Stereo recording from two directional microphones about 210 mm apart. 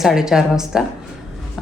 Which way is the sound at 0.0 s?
Centre (ahead or behind).